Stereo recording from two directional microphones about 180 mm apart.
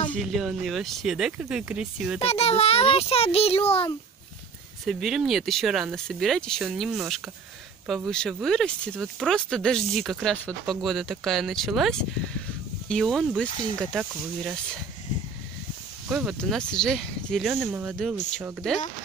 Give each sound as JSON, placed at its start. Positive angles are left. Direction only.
{"t": 0.1, "sound": "speech", "side_deg": 0}
{"t": 2.1, "sound": "a child's voice", "side_deg": 35}
{"t": 4.8, "sound": "speech", "side_deg": 0}
{"t": 16.1, "sound": "speech", "side_deg": -5}